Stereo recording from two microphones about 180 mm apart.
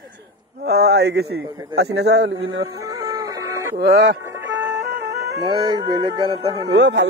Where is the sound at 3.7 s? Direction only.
70° right (ahead or behind).